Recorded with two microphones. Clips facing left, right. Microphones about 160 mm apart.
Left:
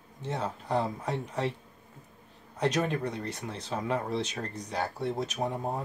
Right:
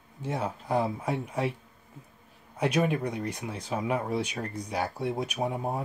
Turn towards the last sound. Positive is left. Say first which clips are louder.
# right 1 dB
turn(degrees=-10)  # may be behind; listen again after turning